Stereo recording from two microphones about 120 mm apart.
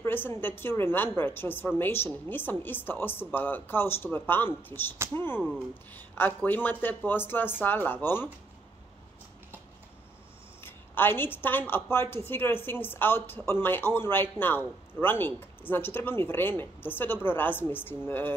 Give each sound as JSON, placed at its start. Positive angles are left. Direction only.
{"t": 0.0, "sound": "a woman's voice", "side_deg": 20}
{"t": 10.6, "sound": "a woman's voice", "side_deg": 15}